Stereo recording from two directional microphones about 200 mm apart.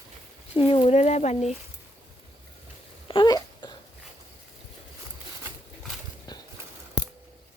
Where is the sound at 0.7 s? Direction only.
30° left (ahead or behind).